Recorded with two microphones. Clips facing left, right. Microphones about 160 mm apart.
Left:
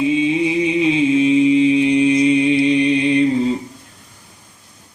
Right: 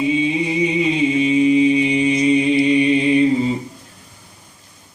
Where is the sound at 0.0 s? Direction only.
Centre (ahead or behind).